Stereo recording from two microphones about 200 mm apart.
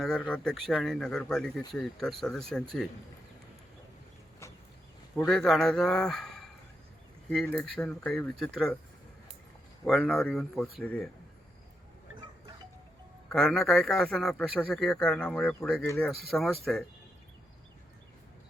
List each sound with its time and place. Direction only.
0.0 s speech: 5° left (ahead or behind)
5.3 s speech: centre (ahead or behind)
9.8 s speech: centre (ahead or behind)
13.3 s speech: centre (ahead or behind)